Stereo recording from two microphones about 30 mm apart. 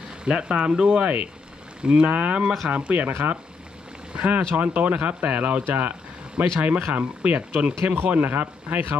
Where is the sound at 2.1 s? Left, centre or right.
Right.